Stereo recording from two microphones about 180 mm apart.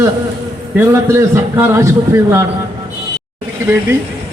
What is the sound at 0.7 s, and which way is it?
A man's voice, 15° right (ahead or behind).